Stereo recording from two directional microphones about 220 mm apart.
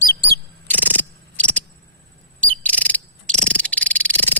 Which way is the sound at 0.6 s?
10° left (ahead or behind).